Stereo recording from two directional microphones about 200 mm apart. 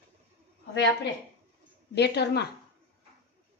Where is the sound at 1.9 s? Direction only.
55° left (ahead or behind).